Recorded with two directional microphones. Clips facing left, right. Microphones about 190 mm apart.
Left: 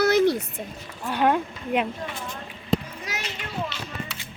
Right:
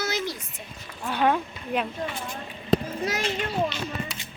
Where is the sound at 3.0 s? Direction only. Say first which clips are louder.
Right 7 dB; 40° right (ahead or behind).